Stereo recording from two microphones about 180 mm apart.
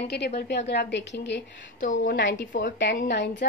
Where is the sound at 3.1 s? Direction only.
75° left (ahead or behind).